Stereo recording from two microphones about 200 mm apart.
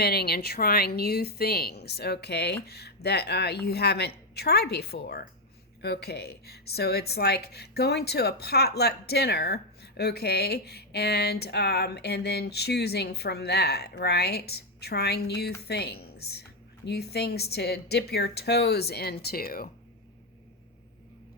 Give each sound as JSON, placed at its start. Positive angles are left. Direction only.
{"t": 0.0, "sound": "a woman's voice", "side_deg": 55}